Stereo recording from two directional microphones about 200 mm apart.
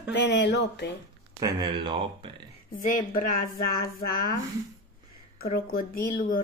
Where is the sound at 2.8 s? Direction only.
40° left (ahead or behind).